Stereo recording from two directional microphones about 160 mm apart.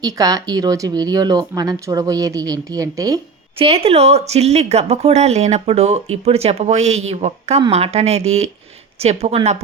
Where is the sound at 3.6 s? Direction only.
40° right (ahead or behind).